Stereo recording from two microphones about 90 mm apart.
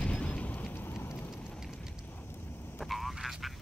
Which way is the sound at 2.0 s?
20° left (ahead or behind).